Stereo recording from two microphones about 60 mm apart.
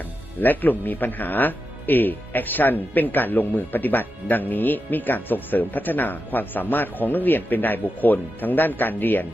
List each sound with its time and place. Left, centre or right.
0.4 s speech: left